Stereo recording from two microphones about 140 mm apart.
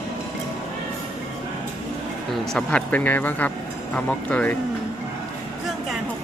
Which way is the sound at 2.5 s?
10° left (ahead or behind).